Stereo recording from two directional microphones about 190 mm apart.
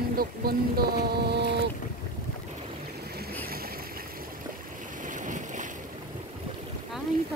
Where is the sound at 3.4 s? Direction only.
50° right (ahead or behind).